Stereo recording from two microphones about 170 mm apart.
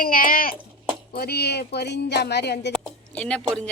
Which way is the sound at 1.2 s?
70° left (ahead or behind).